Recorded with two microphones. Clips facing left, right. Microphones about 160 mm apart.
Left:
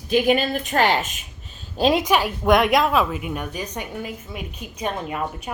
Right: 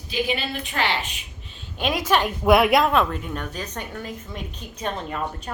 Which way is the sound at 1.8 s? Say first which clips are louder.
Left 7 dB; 35° left (ahead or behind).